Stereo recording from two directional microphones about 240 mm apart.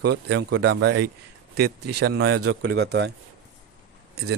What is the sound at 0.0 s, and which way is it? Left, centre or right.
Speech, right.